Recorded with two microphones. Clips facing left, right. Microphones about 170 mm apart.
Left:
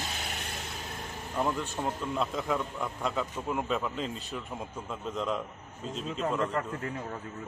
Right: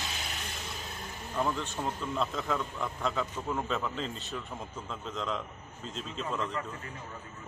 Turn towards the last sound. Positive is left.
turn(degrees=50)  # may be behind; listen again after turning